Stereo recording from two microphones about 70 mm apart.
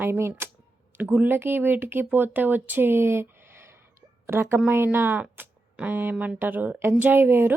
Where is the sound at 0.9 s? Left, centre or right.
Right.